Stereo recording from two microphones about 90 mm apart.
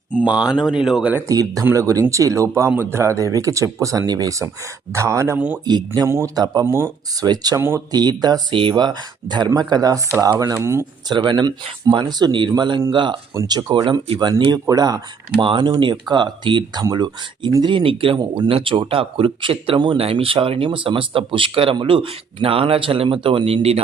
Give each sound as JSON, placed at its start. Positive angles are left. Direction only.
{"t": 0.3, "sound": "speech", "side_deg": -10}
{"t": 1.3, "sound": "speech", "side_deg": -40}
{"t": 5.6, "sound": "speech", "side_deg": -50}
{"t": 6.1, "sound": "speech", "side_deg": -30}
{"t": 6.3, "sound": "speech", "side_deg": -45}
{"t": 6.7, "sound": "speech", "side_deg": -30}
{"t": 7.3, "sound": "speech", "side_deg": -45}
{"t": 10.4, "sound": "speech", "side_deg": -35}
{"t": 11.1, "sound": "speech", "side_deg": -60}
{"t": 13.5, "sound": "speech", "side_deg": -45}
{"t": 15.4, "sound": "speech", "side_deg": -65}
{"t": 16.8, "sound": "speech", "side_deg": -50}
{"t": 17.6, "sound": "speech", "side_deg": -65}